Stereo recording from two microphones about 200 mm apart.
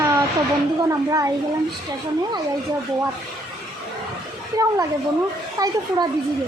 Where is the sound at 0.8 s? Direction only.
15° right (ahead or behind).